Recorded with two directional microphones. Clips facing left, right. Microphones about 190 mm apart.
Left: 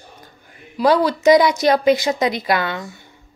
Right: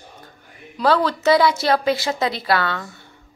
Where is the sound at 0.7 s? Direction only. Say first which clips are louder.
Left 3 dB; 15° left (ahead or behind).